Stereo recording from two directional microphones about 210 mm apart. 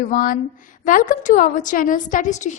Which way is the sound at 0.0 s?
40° left (ahead or behind).